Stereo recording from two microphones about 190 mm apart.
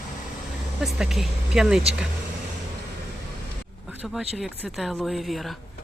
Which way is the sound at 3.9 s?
Centre (ahead or behind).